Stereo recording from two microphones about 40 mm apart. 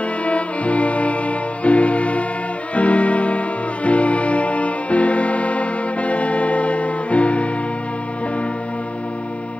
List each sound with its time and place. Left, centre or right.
0.2 s music: left